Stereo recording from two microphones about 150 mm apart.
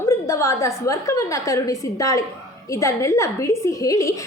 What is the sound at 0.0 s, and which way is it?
A woman's voice, 20° left (ahead or behind).